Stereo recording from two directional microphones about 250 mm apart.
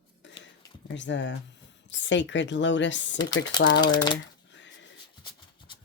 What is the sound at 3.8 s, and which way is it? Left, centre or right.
Speech, centre.